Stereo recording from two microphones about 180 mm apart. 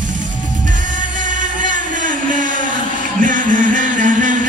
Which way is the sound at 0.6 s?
45° right (ahead or behind).